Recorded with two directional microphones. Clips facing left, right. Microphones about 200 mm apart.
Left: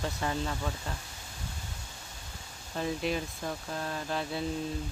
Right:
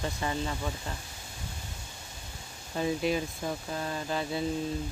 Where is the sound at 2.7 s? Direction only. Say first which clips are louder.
Right 3 dB; 5° right (ahead or behind).